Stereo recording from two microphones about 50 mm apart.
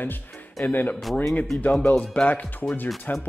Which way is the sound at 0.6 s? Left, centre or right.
Left.